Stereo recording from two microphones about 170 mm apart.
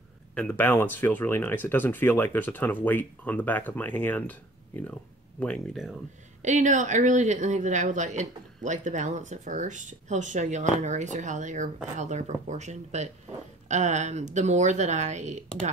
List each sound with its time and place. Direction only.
0.3 s speech: 10° left (ahead or behind)
6.4 s speech: 45° right (ahead or behind)